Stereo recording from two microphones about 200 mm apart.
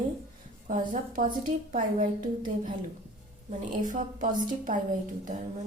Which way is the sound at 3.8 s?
40° right (ahead or behind).